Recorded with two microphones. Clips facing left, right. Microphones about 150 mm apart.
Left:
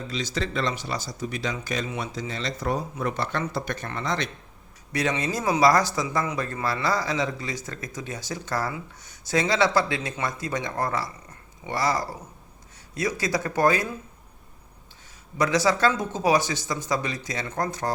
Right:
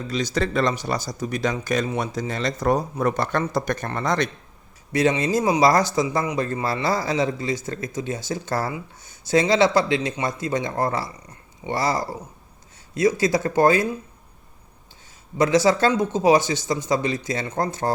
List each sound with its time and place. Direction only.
0.1 s speech: 45° right (ahead or behind)
4.9 s speech: 25° right (ahead or behind)
15.4 s speech: 25° right (ahead or behind)